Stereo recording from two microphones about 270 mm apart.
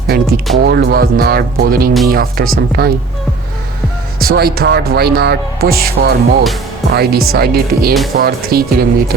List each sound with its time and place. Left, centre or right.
0.1 s music: right
0.6 s speech: right
4.2 s speech: right